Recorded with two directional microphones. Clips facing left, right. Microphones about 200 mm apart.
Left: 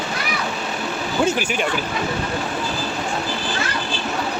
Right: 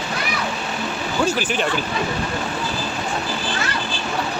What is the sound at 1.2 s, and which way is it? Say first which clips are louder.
Speech: even; 10° left (ahead or behind).